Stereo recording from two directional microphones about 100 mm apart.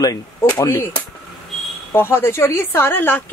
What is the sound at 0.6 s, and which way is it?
Speech, 25° left (ahead or behind).